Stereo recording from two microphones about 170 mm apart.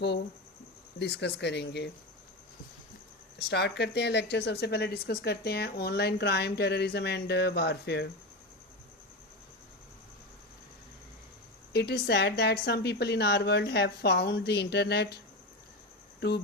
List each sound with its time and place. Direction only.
0.9 s speech: 90° left
3.3 s a woman's voice: 75° left (ahead or behind)
11.7 s a woman's voice: 75° left (ahead or behind)